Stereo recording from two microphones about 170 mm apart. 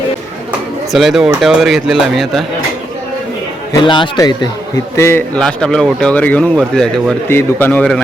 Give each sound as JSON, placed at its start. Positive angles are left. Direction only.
{"t": 0.9, "sound": "speech", "side_deg": 0}
{"t": 3.7, "sound": "a man's voice", "side_deg": 25}
{"t": 5.4, "sound": "speech", "side_deg": 5}